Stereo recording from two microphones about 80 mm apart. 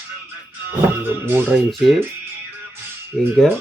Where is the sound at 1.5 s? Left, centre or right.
Centre.